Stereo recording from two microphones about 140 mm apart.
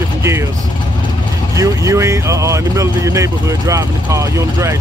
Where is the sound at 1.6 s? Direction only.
20° right (ahead or behind).